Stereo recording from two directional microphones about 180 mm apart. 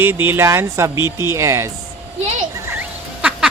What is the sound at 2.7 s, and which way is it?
Duck, 10° right (ahead or behind).